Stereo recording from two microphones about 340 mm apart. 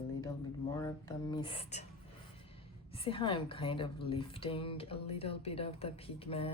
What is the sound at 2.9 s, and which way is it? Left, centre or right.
A woman's voice, centre.